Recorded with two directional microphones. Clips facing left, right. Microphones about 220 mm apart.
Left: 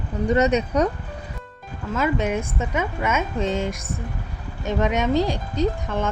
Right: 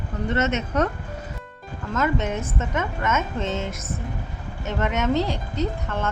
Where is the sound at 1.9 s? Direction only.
10° left (ahead or behind).